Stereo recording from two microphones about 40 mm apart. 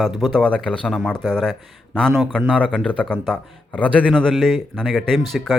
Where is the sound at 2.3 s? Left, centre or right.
Left.